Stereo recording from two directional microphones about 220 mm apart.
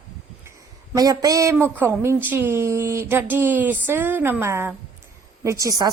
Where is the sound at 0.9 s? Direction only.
15° right (ahead or behind).